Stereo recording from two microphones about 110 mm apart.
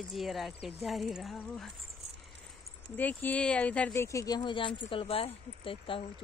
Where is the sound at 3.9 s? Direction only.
25° left (ahead or behind); by 6.1 s 55° left (ahead or behind).